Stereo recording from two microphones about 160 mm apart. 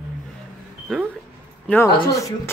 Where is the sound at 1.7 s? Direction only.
20° left (ahead or behind).